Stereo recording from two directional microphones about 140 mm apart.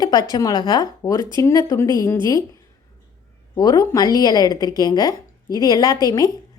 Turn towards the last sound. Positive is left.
turn(degrees=25)  # may be behind; listen again after turning